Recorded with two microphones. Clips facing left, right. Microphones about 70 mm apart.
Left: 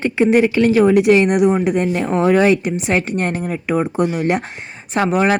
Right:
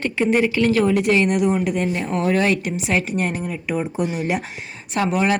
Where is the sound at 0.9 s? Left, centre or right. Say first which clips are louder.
Left 5 dB; left.